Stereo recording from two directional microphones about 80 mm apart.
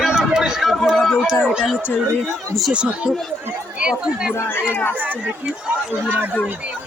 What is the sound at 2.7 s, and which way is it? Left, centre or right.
Speech, centre.